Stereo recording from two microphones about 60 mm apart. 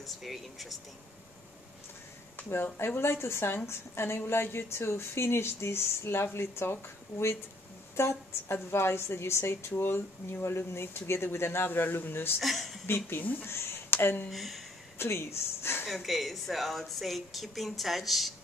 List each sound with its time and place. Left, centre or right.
0.0 s a woman's voice: centre
2.3 s a woman's voice: left
12.4 s speech: centre
12.8 s a man's voice: left
13.5 s a sound: left
14.3 s a woman's voice: centre
15.0 s speech: left
15.9 s a woman's voice: centre